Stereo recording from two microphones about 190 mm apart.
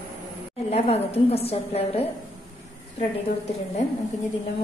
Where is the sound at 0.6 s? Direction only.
35° left (ahead or behind).